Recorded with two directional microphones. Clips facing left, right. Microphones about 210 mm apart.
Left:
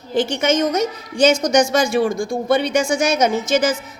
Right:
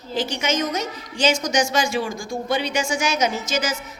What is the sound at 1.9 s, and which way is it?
A woman's voice, 60° left (ahead or behind).